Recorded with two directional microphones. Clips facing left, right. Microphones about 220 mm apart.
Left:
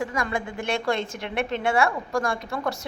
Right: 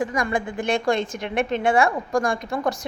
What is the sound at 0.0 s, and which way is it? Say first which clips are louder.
A woman's voice: right 4 dB; 15° right (ahead or behind).